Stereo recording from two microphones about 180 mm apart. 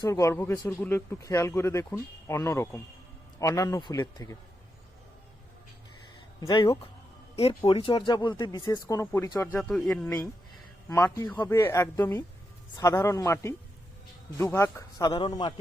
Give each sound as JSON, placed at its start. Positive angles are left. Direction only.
{"t": 0.0, "sound": "speech", "side_deg": 15}
{"t": 6.4, "sound": "speech", "side_deg": 20}
{"t": 9.6, "sound": "a man's voice", "side_deg": 0}
{"t": 10.8, "sound": "speech", "side_deg": 15}